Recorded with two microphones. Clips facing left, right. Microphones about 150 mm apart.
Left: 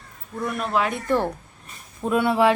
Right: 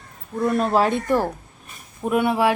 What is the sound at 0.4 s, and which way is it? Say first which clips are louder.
Speech: right 5 dB; 35° right (ahead or behind).